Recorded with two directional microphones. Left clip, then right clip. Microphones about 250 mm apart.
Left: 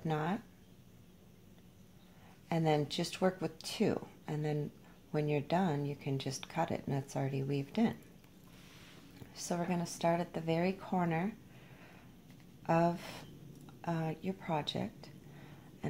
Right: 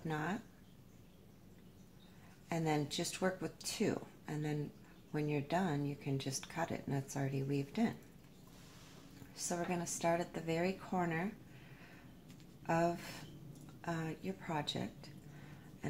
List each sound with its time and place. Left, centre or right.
0.0 s a sound: left
2.5 s speech: left
9.3 s speech: left
12.6 s speech: left